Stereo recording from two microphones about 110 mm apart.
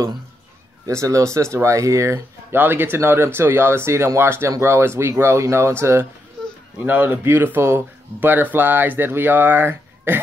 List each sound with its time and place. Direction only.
0.8 s speech: 30° right (ahead or behind)